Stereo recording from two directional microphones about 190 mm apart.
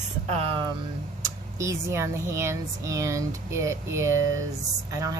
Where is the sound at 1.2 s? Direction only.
15° right (ahead or behind).